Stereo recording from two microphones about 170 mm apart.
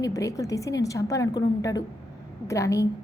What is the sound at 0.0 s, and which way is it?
A woman's voice, 20° left (ahead or behind).